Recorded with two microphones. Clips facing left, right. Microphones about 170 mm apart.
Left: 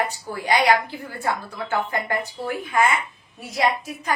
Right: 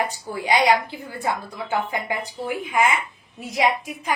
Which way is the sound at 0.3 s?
15° right (ahead or behind).